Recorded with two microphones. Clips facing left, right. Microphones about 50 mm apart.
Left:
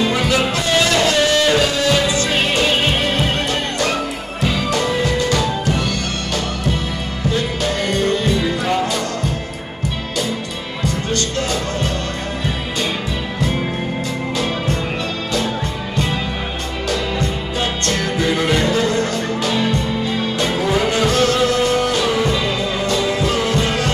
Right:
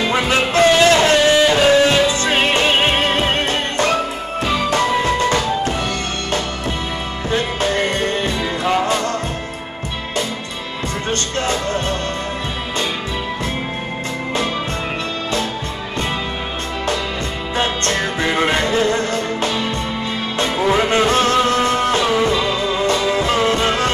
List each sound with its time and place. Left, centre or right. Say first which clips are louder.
0.0 s music: even; right
1.7 s music: right 4 dB; right
7.2 s music: right 1 dB; right
11.1 s music: right 3 dB; right
17.6 s music: right 2 dB; right
22.1 s music: right 2 dB; centre
22.6 s music: right 1 dB; right